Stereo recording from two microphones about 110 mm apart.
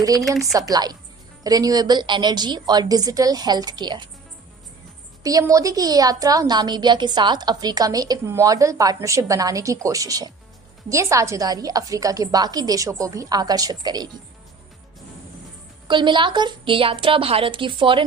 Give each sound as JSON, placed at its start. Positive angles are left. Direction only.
{"t": 0.5, "sound": "a woman's voice", "side_deg": -35}
{"t": 5.2, "sound": "a woman's voice", "side_deg": -30}
{"t": 15.9, "sound": "a woman's voice", "side_deg": -45}